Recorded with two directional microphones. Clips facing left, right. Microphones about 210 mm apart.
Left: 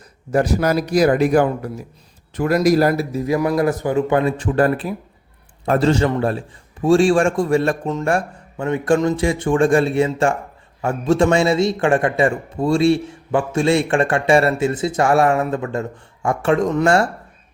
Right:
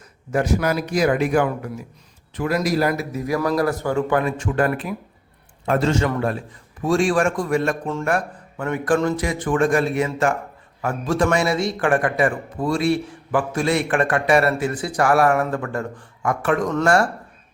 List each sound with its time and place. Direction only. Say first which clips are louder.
0.3 s a man's voice: left 3 dB; 35° left (ahead or behind)